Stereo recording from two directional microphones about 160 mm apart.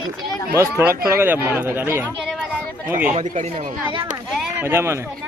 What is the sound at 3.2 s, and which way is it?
Speech, 50° right (ahead or behind).